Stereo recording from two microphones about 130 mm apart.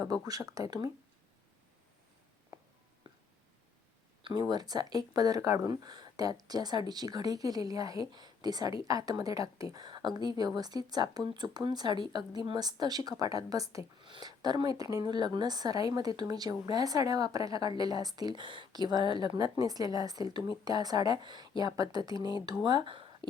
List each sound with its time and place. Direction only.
0.0 s speech: 30° right (ahead or behind)
3.1 s a sound: 40° right (ahead or behind)
4.2 s speech: 35° right (ahead or behind)
14.0 s speech: 35° right (ahead or behind)